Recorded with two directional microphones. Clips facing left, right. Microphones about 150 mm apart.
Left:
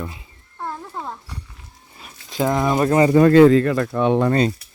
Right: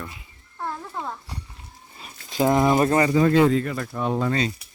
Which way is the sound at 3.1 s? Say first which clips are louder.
Left 7 dB; 70° left (ahead or behind).